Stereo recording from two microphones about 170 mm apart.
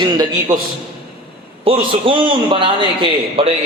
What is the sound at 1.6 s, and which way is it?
A man's voice, 30° right (ahead or behind).